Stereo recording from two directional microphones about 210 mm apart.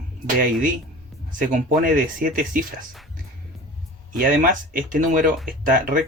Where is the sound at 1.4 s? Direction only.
40° right (ahead or behind).